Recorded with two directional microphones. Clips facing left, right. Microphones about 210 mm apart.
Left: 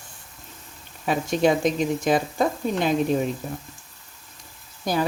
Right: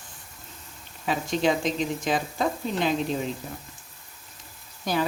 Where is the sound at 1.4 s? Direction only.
50° left (ahead or behind).